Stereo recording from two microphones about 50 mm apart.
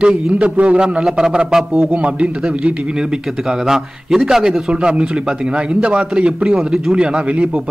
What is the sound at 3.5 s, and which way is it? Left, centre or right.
A man's voice, centre.